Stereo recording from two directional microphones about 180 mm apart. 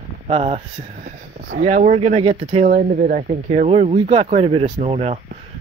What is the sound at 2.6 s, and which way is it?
Speech, 50° right (ahead or behind).